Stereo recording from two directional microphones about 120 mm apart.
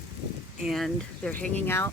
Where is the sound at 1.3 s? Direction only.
15° left (ahead or behind).